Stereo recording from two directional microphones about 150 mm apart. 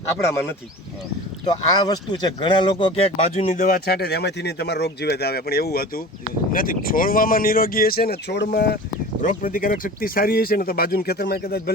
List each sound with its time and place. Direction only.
0.2 s speech: 15° left (ahead or behind)
1.8 s speech: 30° left (ahead or behind); by 3.7 s 45° left (ahead or behind)
3.7 s speech: 90° left
6.5 s speech: 70° left (ahead or behind); by 8.8 s 90° left
9.2 s speech: 65° left (ahead or behind); by 11.7 s 90° left